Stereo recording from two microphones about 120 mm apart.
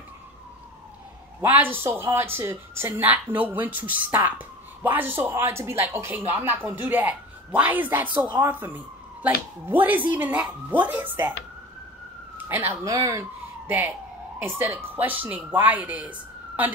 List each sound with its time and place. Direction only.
1.4 s speech: 15° right (ahead or behind)
12.4 s speech: 15° right (ahead or behind)
12.8 s speech: 25° right (ahead or behind)